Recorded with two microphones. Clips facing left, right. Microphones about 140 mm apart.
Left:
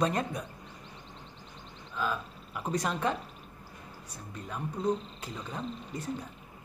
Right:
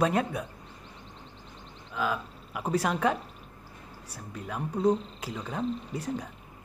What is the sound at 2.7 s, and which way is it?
Speech, 65° right (ahead or behind).